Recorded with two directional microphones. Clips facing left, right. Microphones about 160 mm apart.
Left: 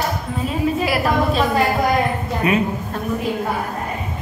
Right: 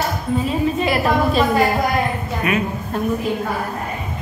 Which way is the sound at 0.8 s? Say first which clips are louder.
Right 2 dB; 5° left (ahead or behind).